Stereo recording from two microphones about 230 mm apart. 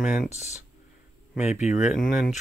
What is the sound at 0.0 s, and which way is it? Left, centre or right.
Speech, centre.